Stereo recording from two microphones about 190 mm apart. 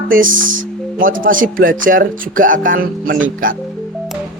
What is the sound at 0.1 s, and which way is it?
Speech, 45° right (ahead or behind).